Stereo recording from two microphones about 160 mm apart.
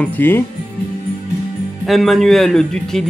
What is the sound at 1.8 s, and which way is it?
Speech, centre (ahead or behind).